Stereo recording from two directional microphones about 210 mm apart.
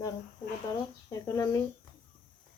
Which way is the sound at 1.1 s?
15° left (ahead or behind).